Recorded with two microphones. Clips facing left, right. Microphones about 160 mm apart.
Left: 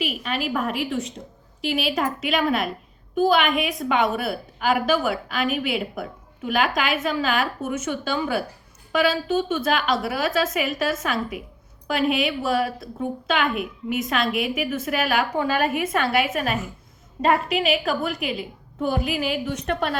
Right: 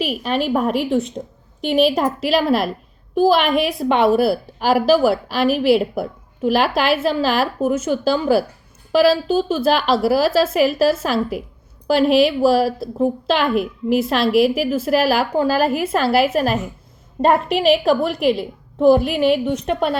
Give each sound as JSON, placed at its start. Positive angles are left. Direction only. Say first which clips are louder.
{"t": 0.0, "sound": "a woman's voice", "louder": "right 6 dB", "side_deg": -35}
{"t": 17.8, "sound": "a woman's voice", "louder": "right 9 dB", "side_deg": -35}